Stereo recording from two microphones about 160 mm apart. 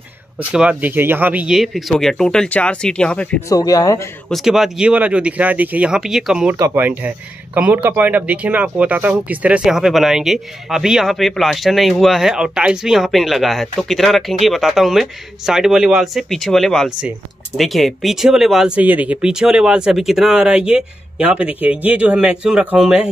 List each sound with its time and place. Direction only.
0.5 s speech: 10° right (ahead or behind); by 3.4 s 10° left (ahead or behind)
3.4 s speech: 20° left (ahead or behind)
4.3 s speech: centre (ahead or behind)